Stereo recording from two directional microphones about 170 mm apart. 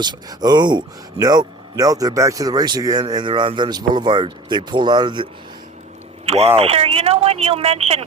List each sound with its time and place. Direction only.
0.0 s speech: 25° right (ahead or behind)